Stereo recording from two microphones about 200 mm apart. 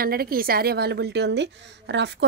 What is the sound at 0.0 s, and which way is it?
A woman's voice, 50° right (ahead or behind).